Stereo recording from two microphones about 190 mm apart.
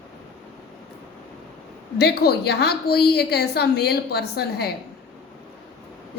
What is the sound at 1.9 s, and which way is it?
A woman's voice, 60° left (ahead or behind).